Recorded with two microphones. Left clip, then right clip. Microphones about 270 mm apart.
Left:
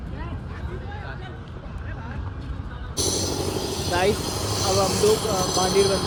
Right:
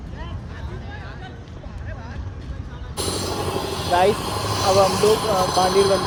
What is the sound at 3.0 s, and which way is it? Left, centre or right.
Vehicle, right.